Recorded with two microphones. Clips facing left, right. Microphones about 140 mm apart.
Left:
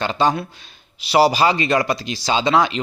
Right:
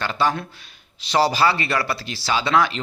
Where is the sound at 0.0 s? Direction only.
20° left (ahead or behind).